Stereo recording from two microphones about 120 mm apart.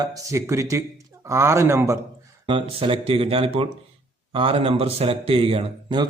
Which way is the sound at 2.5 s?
45° right (ahead or behind).